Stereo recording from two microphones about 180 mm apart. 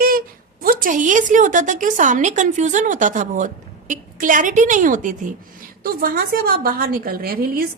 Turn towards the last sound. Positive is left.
turn(degrees=-55)  # may be behind; listen again after turning